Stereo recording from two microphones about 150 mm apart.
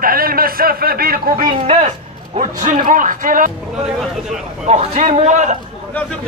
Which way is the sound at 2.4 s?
60° right (ahead or behind).